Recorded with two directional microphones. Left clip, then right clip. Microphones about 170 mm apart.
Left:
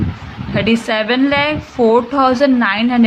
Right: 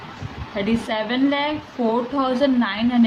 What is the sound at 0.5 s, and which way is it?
A woman's voice, 40° left (ahead or behind).